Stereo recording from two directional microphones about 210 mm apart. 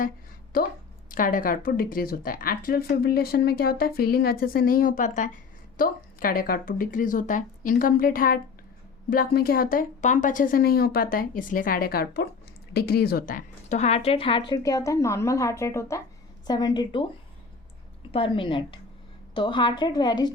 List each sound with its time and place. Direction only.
0.5 s a woman's voice: 45° left (ahead or behind); by 17.1 s 20° left (ahead or behind)
18.1 s a woman's voice: 25° left (ahead or behind)